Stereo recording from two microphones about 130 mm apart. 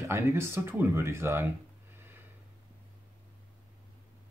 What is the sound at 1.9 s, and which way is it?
Snort, 15° right (ahead or behind).